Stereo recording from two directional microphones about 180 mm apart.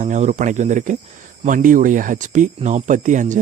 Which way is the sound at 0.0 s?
40° right (ahead or behind).